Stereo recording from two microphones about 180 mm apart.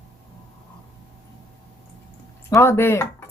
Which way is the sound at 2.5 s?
15° left (ahead or behind).